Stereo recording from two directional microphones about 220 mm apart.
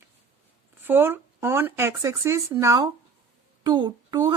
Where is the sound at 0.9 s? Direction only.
10° right (ahead or behind).